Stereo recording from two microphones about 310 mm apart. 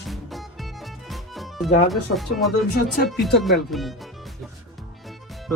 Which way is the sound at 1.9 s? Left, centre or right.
Centre.